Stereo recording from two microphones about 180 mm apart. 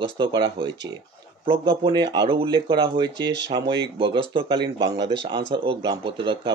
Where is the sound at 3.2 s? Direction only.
75° right (ahead or behind).